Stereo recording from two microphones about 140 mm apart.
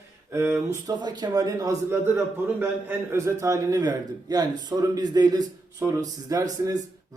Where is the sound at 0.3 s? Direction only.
20° right (ahead or behind).